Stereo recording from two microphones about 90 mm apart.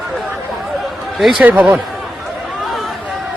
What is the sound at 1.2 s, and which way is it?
Speech, 5° right (ahead or behind).